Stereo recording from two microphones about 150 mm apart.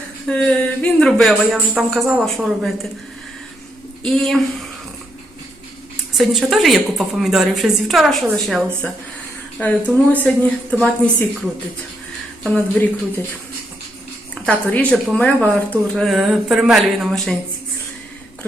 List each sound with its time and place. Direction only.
0.3 s a woman's voice: 5° left (ahead or behind)
4.0 s a woman's voice: centre (ahead or behind)
6.1 s a woman's voice: centre (ahead or behind)
12.4 s a woman's voice: centre (ahead or behind)
14.4 s a woman's voice: 10° left (ahead or behind)